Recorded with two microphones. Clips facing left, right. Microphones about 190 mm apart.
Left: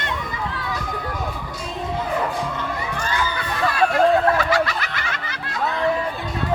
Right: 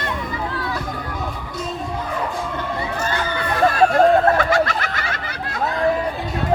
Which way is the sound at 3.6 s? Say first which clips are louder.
Right 3 dB; 40° right (ahead or behind).